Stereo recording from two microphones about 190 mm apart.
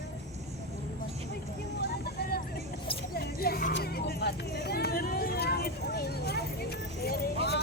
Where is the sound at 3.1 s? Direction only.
55° left (ahead or behind).